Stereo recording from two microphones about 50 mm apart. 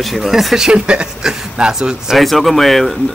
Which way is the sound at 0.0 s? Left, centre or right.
Centre.